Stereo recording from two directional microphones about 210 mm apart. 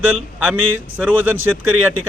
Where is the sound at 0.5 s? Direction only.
75° right (ahead or behind).